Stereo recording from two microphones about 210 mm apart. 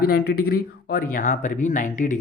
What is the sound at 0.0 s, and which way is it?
Speech, 45° left (ahead or behind).